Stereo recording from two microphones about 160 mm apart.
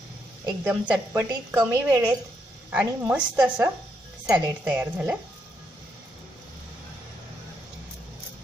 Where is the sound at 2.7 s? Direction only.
10° right (ahead or behind).